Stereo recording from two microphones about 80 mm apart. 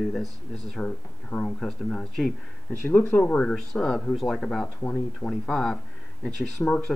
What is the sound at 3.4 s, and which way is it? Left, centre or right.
Speech, centre.